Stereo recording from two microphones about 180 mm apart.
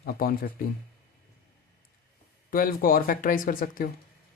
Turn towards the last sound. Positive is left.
turn(degrees=50)  # may be behind; listen again after turning